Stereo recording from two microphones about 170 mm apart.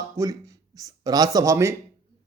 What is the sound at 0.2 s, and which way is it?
Speech, 20° right (ahead or behind).